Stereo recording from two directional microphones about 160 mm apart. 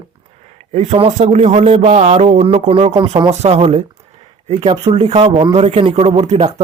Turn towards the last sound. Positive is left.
turn(degrees=-45)  # may be behind; listen again after turning